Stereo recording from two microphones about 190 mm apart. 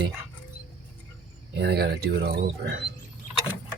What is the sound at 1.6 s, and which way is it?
Speech, 55° right (ahead or behind).